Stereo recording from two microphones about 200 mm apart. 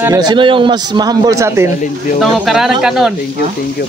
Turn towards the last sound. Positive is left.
turn(degrees=0)  # may be behind; listen again after turning